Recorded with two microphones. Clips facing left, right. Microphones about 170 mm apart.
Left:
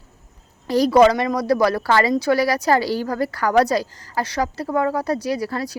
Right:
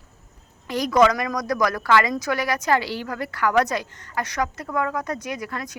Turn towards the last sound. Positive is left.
turn(degrees=35)  # may be behind; listen again after turning